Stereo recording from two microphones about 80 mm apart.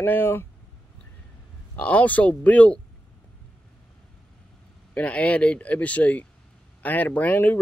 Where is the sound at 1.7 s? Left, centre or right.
Centre.